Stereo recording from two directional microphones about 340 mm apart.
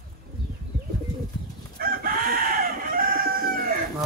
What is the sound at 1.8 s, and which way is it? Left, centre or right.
Chicken, right.